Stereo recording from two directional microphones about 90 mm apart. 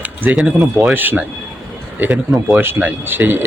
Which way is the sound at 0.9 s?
20° right (ahead or behind).